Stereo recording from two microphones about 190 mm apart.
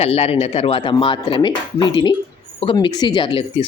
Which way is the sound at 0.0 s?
30° left (ahead or behind).